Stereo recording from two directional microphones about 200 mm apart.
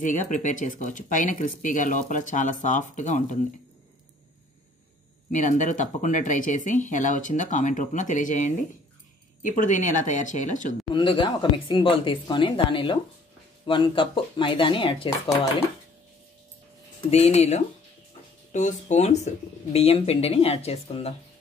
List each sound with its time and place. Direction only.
0.0 s speech: 40° left (ahead or behind)
5.3 s speech: 40° left (ahead or behind)
11.0 s speech: 25° left (ahead or behind)
17.1 s speech: 35° left (ahead or behind)